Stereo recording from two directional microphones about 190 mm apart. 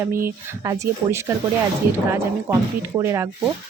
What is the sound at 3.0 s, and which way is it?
Speech, 15° right (ahead or behind).